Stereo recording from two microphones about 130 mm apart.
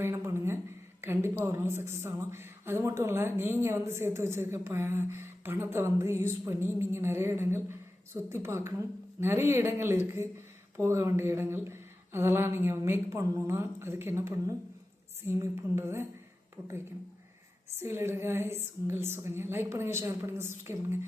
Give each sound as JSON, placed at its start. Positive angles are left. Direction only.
{"t": 0.0, "sound": "a sound", "side_deg": -20}
{"t": 1.0, "sound": "a woman's voice", "side_deg": -20}
{"t": 17.7, "sound": "a woman's voice", "side_deg": -20}